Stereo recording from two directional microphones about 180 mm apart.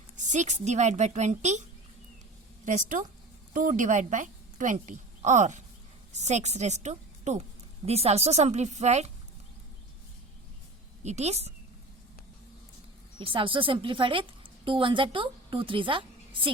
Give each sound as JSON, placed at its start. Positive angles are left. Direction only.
{"t": 0.2, "sound": "speech", "side_deg": -40}
{"t": 2.6, "sound": "a woman's voice", "side_deg": -45}
{"t": 11.0, "sound": "speech", "side_deg": -40}
{"t": 13.1, "sound": "a woman's voice", "side_deg": -30}